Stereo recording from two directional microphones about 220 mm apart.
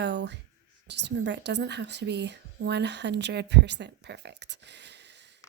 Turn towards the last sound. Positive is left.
turn(degrees=-50)  # may be behind; listen again after turning